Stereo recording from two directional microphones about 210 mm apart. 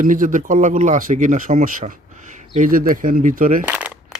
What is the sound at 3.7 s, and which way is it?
Shuffling cards, 5° right (ahead or behind).